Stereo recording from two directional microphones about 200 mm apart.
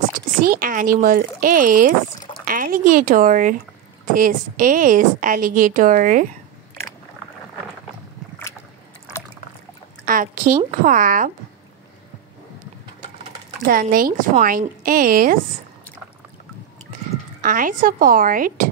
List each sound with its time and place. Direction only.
0.5 s a woman's voice: 45° right (ahead or behind)
10.0 s a woman's voice: 40° right (ahead or behind)
13.7 s a woman's voice: 45° right (ahead or behind)
17.4 s a woman's voice: 45° right (ahead or behind)